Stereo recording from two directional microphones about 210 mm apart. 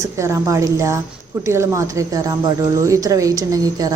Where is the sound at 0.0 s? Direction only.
15° right (ahead or behind).